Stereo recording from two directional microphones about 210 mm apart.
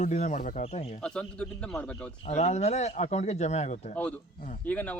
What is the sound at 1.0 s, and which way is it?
Speech, 5° left (ahead or behind).